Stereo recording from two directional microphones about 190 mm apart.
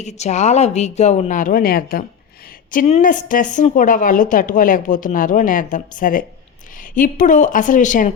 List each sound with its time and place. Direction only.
0.0 s speech: 35° left (ahead or behind)
2.7 s a woman's voice: 40° left (ahead or behind)